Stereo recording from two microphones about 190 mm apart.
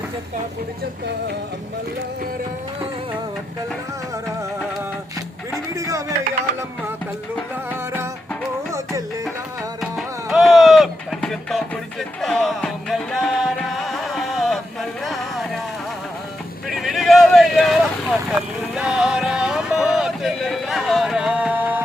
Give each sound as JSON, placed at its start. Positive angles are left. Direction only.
{"t": 5.7, "sound": "a sound", "side_deg": -15}
{"t": 8.7, "sound": "music", "side_deg": -15}
{"t": 9.8, "sound": "music", "side_deg": 0}
{"t": 16.6, "sound": "vehicle", "side_deg": 0}